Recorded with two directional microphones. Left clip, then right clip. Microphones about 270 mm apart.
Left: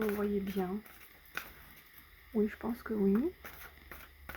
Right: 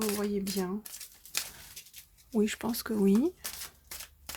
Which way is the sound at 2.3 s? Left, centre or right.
Right.